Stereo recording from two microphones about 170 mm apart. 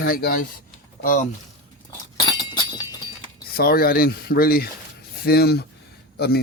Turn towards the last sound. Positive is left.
turn(degrees=70)  # may be behind; listen again after turning